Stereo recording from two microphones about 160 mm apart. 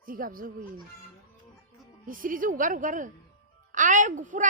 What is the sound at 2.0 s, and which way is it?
A woman's voice, 60° right (ahead or behind).